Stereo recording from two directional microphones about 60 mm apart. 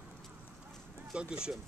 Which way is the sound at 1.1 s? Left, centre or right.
Centre.